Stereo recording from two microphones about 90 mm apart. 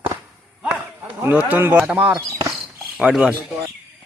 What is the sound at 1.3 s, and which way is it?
Speech, 20° right (ahead or behind).